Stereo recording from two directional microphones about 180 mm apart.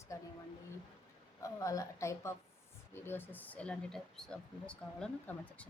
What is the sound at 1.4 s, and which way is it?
Speech, 15° left (ahead or behind).